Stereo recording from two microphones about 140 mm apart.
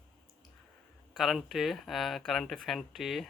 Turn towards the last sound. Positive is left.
turn(degrees=0)  # may be behind; listen again after turning